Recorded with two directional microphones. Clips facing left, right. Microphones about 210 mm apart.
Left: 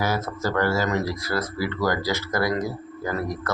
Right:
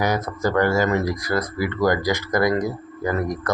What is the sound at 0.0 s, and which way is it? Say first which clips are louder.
Speech: right 3 dB; 15° right (ahead or behind).